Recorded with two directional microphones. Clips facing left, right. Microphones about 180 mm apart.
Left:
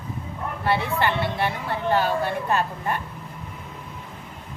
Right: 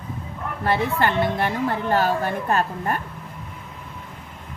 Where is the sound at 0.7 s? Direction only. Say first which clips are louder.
Right 2 dB; 45° right (ahead or behind).